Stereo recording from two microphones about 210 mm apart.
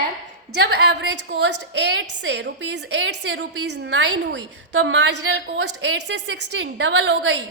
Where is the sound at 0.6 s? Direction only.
55° right (ahead or behind).